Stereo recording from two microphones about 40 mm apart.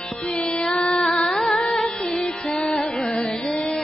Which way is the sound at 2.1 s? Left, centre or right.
Centre.